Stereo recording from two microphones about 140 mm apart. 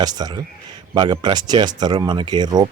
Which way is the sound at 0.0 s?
30° right (ahead or behind).